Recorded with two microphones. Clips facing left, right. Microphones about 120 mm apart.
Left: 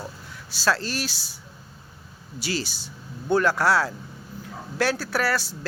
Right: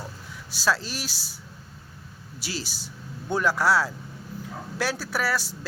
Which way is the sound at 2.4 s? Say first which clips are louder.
Left 5 dB; 5° right (ahead or behind).